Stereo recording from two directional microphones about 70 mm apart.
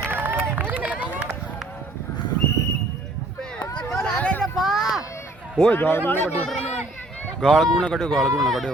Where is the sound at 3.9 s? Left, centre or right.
Centre.